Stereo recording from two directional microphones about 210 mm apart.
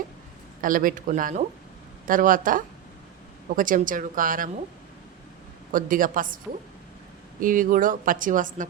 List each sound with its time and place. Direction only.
0.6 s speech: 40° right (ahead or behind)
5.7 s speech: 40° right (ahead or behind)